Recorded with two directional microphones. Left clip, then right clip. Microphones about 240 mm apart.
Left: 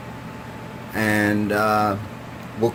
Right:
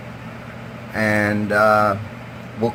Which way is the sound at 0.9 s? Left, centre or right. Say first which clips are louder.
Right 2 dB; left.